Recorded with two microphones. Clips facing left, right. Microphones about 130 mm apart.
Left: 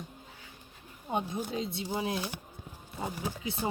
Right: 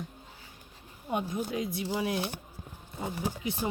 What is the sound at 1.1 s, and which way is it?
Speech, 25° left (ahead or behind).